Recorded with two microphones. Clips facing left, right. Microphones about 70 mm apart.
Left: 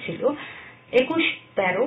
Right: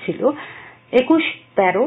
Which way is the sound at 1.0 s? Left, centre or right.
Right.